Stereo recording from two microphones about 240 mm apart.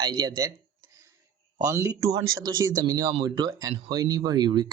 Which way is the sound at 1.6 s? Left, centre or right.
Centre.